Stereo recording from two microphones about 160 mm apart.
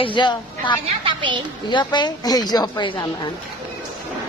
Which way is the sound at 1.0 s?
30° right (ahead or behind).